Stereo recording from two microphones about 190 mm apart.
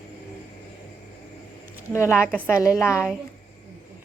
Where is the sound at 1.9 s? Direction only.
10° left (ahead or behind).